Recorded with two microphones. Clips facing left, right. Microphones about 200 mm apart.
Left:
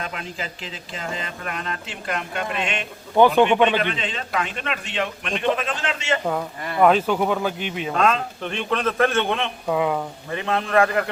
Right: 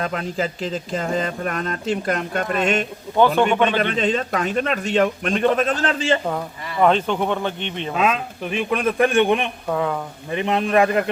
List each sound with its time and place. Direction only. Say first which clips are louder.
0.0 s speech: right 8 dB; 40° right (ahead or behind)
3.2 s a man's voice: left 1 dB; 15° left (ahead or behind)
3.8 s speech: right 6 dB; 45° right (ahead or behind)
6.2 s speech: left 1 dB; centre (ahead or behind)
7.9 s a man's voice: even; 5° right (ahead or behind)
9.6 s a man's voice: left 2 dB; 10° left (ahead or behind)
10.3 s a man's voice: right 2 dB; 20° right (ahead or behind)